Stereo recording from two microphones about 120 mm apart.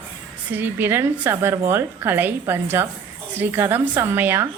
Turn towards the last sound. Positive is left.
turn(degrees=-15)  # may be behind; listen again after turning